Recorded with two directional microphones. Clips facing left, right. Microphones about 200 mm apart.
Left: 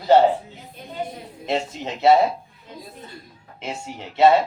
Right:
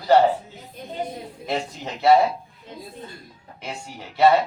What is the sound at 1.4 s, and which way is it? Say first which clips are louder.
Speech: left 3 dB; 25° left (ahead or behind).